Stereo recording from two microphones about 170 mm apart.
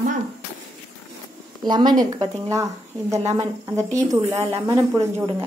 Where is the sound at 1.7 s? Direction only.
25° right (ahead or behind).